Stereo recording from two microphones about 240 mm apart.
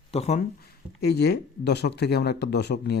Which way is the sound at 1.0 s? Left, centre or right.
Left.